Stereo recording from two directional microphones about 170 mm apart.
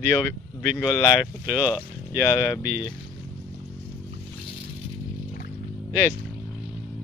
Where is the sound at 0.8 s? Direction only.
15° left (ahead or behind).